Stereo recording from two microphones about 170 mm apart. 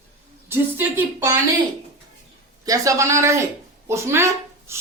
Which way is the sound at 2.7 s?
20° right (ahead or behind).